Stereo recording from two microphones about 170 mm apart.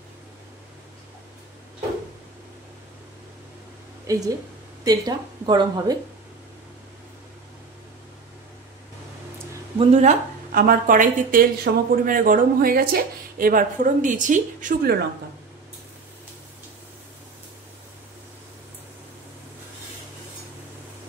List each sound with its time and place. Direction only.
4.1 s speech: 20° right (ahead or behind)
9.8 s speech: 40° right (ahead or behind)
10.5 s speech: 55° right (ahead or behind)